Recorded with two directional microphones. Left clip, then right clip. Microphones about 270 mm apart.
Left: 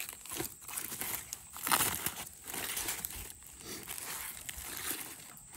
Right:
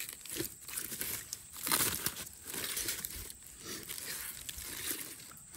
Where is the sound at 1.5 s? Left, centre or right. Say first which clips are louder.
Left 3 dB; centre.